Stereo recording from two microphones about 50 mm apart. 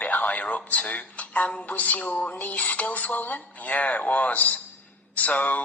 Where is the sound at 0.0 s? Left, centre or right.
Left.